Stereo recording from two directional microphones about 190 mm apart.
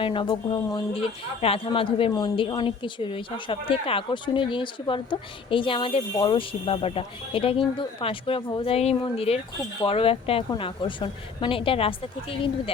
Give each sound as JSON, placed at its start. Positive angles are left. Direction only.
{"t": 0.0, "sound": "a woman's voice", "side_deg": 25}